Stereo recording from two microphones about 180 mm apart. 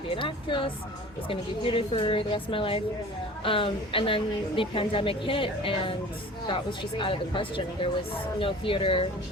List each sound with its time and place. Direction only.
0.1 s a woman's voice: 30° left (ahead or behind)